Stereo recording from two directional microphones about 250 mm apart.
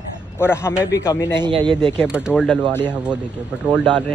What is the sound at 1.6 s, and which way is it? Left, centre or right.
Speech, centre.